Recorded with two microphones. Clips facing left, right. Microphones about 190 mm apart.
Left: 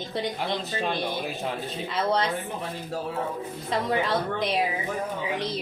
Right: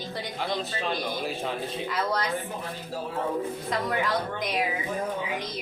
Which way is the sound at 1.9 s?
25° left (ahead or behind).